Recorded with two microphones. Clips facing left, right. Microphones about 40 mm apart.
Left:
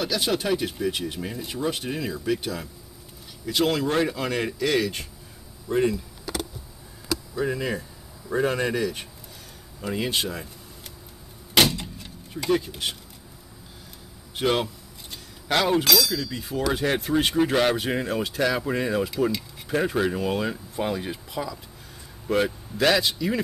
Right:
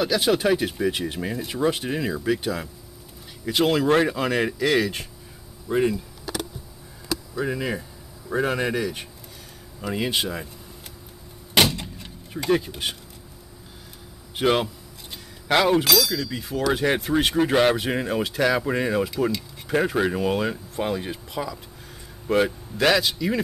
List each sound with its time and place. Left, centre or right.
0.0 s speech: centre
3.8 s speech: right
4.1 s speech: centre
7.3 s speech: centre
11.5 s vehicle: centre
12.4 s speech: centre
14.3 s speech: centre
16.8 s speech: centre